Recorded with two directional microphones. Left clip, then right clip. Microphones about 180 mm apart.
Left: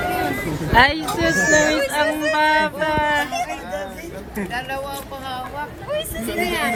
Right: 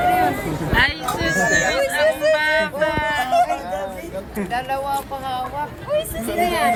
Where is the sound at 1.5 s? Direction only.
15° left (ahead or behind).